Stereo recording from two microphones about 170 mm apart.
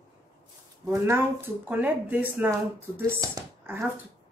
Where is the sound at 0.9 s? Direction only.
15° right (ahead or behind).